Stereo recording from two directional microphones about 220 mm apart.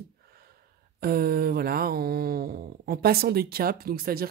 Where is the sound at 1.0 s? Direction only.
45° right (ahead or behind).